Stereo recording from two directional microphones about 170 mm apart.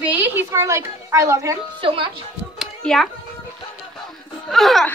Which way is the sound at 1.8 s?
30° right (ahead or behind).